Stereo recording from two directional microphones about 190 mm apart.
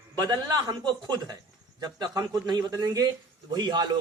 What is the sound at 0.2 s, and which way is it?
Speech, 20° right (ahead or behind).